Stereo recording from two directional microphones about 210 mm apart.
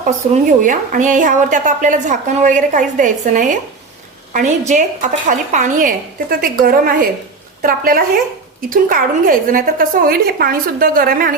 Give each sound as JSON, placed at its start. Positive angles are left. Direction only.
{"t": 0.2, "sound": "a woman's voice", "side_deg": -35}